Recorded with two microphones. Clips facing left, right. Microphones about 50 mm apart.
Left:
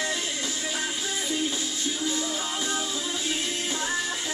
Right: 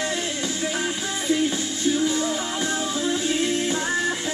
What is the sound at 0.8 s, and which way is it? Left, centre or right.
Music, right.